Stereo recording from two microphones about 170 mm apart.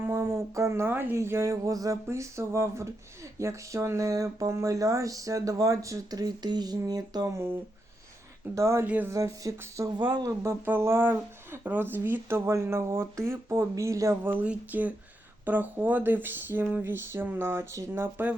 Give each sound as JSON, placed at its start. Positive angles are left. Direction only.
{"t": 0.0, "sound": "speech", "side_deg": -15}
{"t": 8.5, "sound": "speech", "side_deg": -15}